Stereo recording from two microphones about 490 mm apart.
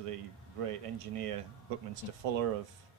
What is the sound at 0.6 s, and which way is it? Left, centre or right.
Speech, right.